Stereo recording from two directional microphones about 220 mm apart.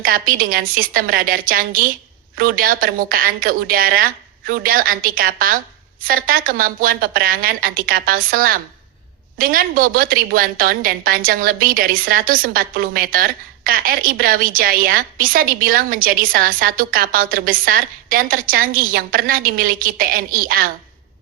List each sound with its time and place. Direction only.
0.0 s a woman's voice: 40° right (ahead or behind)